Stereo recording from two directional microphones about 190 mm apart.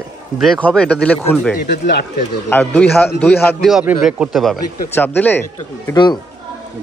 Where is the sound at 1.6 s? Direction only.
60° left (ahead or behind).